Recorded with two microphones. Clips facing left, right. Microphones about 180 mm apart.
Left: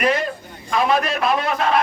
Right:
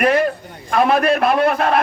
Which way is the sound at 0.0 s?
60° right (ahead or behind).